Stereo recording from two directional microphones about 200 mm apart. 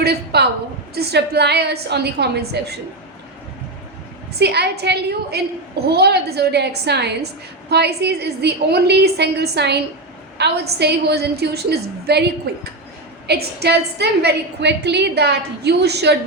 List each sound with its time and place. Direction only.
0.0 s a sound: 55° right (ahead or behind)
0.9 s a woman's voice: 55° right (ahead or behind)
4.4 s a woman's voice: 55° right (ahead or behind)